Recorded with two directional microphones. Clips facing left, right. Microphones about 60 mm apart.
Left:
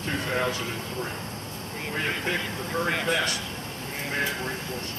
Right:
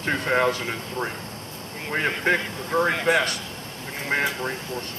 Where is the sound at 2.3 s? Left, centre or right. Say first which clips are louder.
Right 10 dB; right.